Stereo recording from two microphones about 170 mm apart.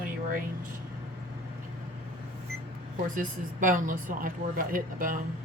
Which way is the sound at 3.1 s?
50° right (ahead or behind).